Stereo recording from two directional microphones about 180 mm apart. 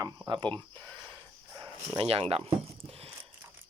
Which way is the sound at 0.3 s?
25° right (ahead or behind).